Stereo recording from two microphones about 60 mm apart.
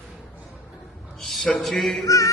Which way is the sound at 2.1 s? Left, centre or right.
Left.